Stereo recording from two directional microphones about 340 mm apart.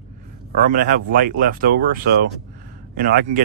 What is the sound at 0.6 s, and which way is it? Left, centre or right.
Speech, right.